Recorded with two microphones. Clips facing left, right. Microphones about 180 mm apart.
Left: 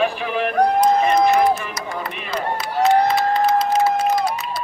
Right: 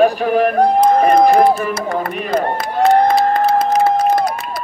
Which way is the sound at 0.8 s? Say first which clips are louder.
Right 5 dB; 50° right (ahead or behind).